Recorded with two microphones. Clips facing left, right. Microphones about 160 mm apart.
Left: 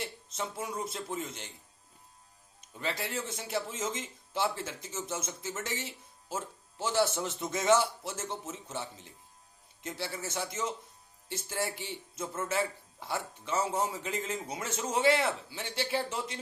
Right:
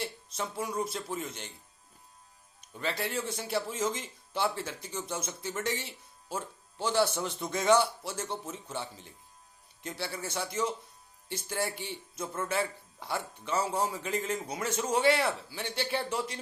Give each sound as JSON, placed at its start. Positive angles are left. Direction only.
{"t": 0.9, "sound": "a man's voice", "side_deg": 25}
{"t": 2.6, "sound": "music", "side_deg": 20}
{"t": 3.2, "sound": "a man's voice", "side_deg": 25}
{"t": 9.8, "sound": "a man's voice", "side_deg": 25}